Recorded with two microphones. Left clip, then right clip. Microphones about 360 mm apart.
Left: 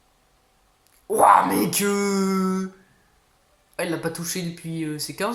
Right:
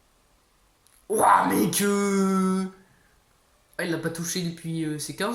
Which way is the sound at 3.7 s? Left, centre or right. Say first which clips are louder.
Left 2 dB; centre.